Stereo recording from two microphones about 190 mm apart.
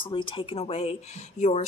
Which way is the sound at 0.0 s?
25° left (ahead or behind).